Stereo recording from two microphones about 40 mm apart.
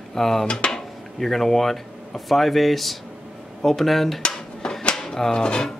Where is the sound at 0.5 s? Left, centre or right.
Left.